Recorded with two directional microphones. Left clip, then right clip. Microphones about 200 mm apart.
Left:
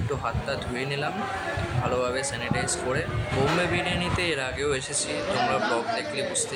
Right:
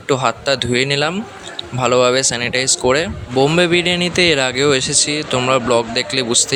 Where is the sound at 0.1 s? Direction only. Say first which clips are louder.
Right 14 dB; 45° right (ahead or behind).